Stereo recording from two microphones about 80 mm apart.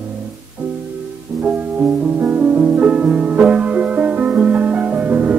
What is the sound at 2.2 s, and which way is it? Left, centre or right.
Music, right.